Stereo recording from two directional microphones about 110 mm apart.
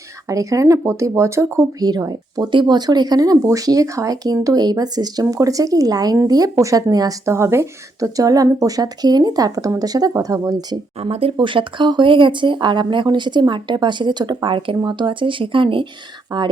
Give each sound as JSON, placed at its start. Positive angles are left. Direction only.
{"t": 0.3, "sound": "speech", "side_deg": -30}
{"t": 1.8, "sound": "speech", "side_deg": -35}
{"t": 11.0, "sound": "speech", "side_deg": -60}